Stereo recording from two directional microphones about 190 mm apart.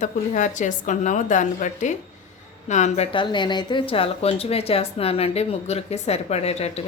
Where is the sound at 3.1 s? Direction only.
25° left (ahead or behind).